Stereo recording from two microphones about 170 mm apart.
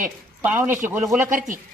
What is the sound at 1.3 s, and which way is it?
Speech, 50° right (ahead or behind).